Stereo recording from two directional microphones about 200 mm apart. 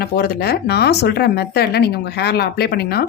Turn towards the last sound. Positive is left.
turn(degrees=50)  # may be behind; listen again after turning